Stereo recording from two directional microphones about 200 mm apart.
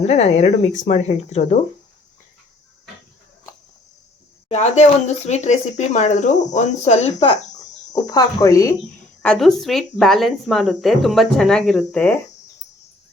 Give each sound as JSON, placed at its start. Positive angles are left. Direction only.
{"t": 0.0, "sound": "speech", "side_deg": 35}
{"t": 4.4, "sound": "speech", "side_deg": 35}
{"t": 7.5, "sound": "speech", "side_deg": 20}
{"t": 9.2, "sound": "speech", "side_deg": 5}